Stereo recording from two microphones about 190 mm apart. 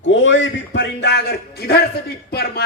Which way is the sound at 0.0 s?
80° left.